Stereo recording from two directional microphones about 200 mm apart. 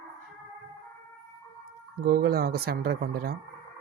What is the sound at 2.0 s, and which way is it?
Speech, 50° right (ahead or behind).